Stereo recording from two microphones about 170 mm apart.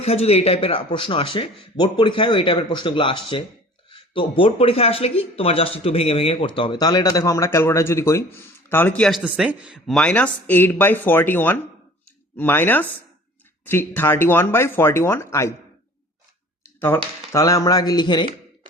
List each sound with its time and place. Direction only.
0.0 s speech: 35° left (ahead or behind); by 9.2 s 5° left (ahead or behind)
9.2 s speech: 5° right (ahead or behind); by 15.5 s 15° left (ahead or behind)
16.8 s speech: 15° left (ahead or behind)